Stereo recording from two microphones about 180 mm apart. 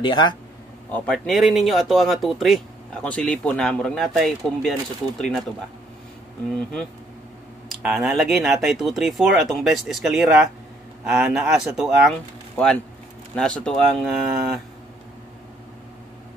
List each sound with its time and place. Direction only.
0.0 s speech: 25° left (ahead or behind)
0.9 s speech: 5° left (ahead or behind)
6.5 s speech: 5° left (ahead or behind)